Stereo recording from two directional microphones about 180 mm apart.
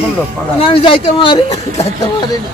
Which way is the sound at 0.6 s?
30° left (ahead or behind).